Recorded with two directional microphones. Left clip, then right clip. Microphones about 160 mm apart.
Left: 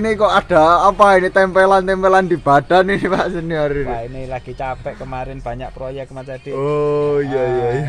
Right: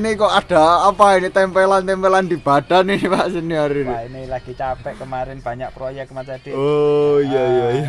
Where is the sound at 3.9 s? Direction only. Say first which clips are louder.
Even; centre (ahead or behind).